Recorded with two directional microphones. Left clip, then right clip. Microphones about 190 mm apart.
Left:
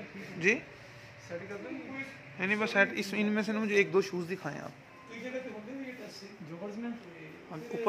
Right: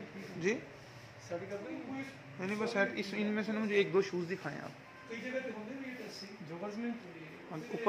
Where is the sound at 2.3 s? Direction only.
25° left (ahead or behind).